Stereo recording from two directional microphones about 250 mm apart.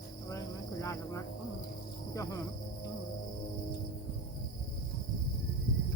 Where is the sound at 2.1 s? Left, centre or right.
Centre.